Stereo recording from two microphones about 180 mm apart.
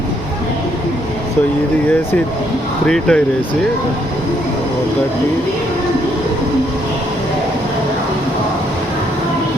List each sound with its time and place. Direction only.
2.8 s speech: 5° left (ahead or behind)